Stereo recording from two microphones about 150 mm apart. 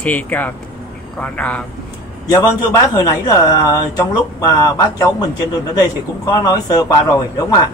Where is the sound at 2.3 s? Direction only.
25° left (ahead or behind).